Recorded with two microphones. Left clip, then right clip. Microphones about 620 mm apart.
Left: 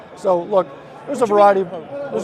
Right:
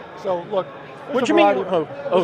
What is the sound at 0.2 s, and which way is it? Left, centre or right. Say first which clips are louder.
A man's voice: left 6 dB; left.